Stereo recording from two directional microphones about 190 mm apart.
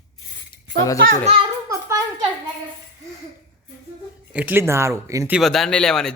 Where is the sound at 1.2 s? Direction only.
35° right (ahead or behind).